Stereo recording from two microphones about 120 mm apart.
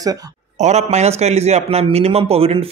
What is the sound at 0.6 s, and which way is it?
A man's voice, 70° right (ahead or behind).